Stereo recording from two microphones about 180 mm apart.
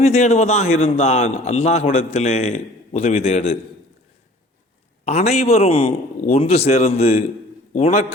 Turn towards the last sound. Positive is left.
turn(degrees=35)  # may be behind; listen again after turning